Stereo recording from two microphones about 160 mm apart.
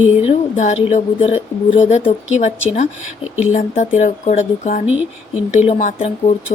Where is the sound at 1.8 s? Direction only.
45° left (ahead or behind).